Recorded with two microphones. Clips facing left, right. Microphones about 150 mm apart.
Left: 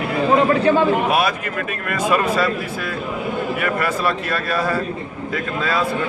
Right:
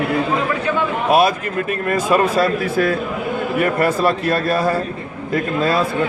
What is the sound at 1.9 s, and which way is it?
Speech, 40° right (ahead or behind).